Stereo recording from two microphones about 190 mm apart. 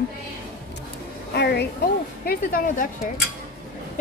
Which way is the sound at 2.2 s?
50° left (ahead or behind).